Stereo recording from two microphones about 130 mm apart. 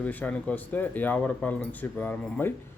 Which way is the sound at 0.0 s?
10° left (ahead or behind).